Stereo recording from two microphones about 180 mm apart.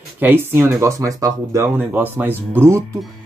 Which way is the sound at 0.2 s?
10° right (ahead or behind).